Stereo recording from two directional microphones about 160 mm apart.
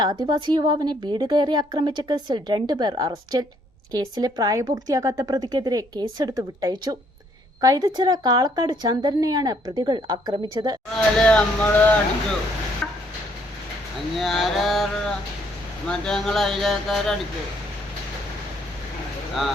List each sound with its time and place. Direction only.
0.0 s a woman's voice: 30° right (ahead or behind)
11.2 s speech: 5° left (ahead or behind)
12.8 s a sound: 5° left (ahead or behind)
14.2 s speech: centre (ahead or behind)
19.3 s speech: centre (ahead or behind)